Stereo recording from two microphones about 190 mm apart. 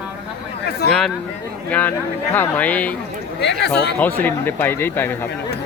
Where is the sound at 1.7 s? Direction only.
10° left (ahead or behind).